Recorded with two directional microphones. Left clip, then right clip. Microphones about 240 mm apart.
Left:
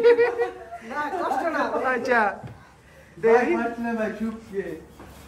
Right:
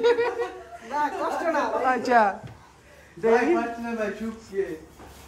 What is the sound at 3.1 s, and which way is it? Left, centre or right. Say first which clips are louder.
Speech: left 2 dB; centre.